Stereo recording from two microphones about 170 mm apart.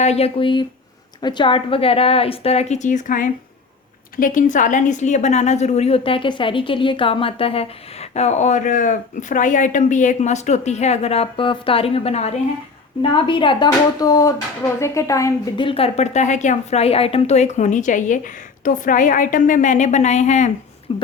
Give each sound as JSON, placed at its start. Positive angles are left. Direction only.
{"t": 0.0, "sound": "a woman's voice", "side_deg": 35}
{"t": 15.6, "sound": "a woman's voice", "side_deg": 35}